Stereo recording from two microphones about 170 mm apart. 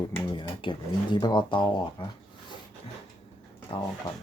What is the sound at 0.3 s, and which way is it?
Speech, 30° left (ahead or behind).